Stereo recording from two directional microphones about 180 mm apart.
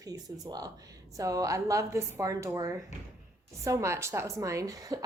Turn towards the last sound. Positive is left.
turn(degrees=-20)  # may be behind; listen again after turning